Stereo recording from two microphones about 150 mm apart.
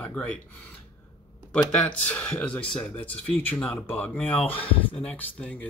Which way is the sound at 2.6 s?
40° left (ahead or behind).